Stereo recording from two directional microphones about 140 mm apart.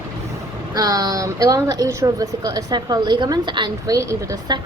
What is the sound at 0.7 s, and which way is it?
A woman's voice, 25° right (ahead or behind).